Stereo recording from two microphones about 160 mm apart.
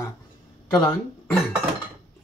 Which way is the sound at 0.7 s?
15° left (ahead or behind).